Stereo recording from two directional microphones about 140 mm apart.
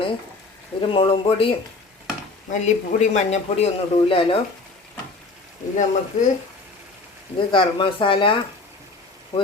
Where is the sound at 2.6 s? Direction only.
55° left (ahead or behind).